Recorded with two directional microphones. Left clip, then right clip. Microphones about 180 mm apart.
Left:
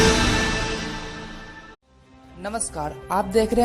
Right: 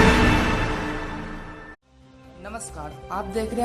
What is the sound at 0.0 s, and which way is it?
Music, centre (ahead or behind).